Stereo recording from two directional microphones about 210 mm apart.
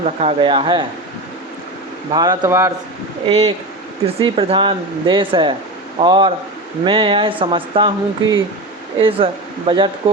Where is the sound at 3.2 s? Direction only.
30° right (ahead or behind).